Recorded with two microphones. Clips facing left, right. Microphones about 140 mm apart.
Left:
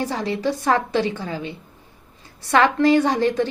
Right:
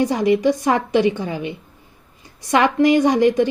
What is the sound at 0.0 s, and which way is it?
A woman's voice, 15° right (ahead or behind).